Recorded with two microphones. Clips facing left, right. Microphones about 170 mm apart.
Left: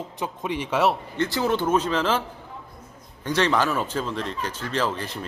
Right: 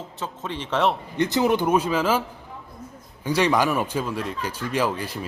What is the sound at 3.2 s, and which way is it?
Speech, 10° right (ahead or behind).